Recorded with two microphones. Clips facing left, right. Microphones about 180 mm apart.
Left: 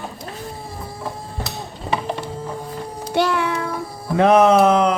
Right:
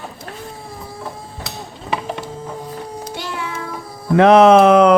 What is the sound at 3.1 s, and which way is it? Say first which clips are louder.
Child singing: left 12 dB; 65° left (ahead or behind).